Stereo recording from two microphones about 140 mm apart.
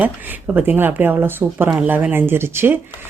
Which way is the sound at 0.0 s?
15° right (ahead or behind).